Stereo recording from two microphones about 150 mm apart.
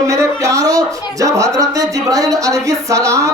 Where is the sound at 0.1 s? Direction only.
20° right (ahead or behind).